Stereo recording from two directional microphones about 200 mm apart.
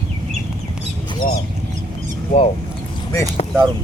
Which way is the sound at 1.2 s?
45° left (ahead or behind).